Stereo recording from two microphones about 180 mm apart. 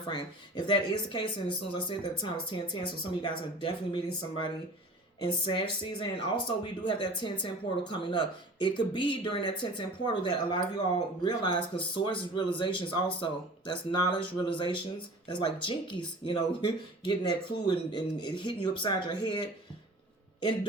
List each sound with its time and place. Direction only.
0.1 s speech: 25° left (ahead or behind)